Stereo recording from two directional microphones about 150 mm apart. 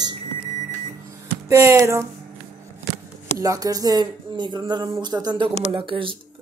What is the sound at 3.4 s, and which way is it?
Speech, 25° right (ahead or behind).